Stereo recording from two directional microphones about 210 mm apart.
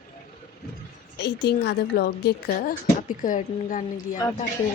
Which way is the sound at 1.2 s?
50° left (ahead or behind).